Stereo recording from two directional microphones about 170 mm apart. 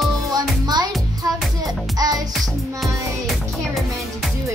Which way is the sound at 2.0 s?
20° right (ahead or behind).